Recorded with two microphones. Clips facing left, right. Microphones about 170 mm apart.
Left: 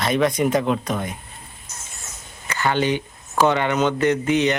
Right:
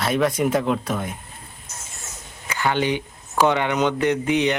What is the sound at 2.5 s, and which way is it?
Speech, 10° right (ahead or behind).